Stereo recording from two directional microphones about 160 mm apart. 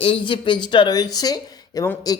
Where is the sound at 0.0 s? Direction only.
30° left (ahead or behind).